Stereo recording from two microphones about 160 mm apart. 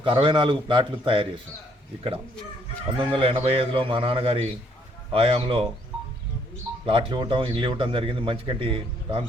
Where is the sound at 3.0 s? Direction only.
30° right (ahead or behind).